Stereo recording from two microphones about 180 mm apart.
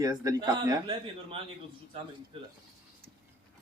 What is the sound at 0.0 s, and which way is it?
A man's voice, 20° right (ahead or behind).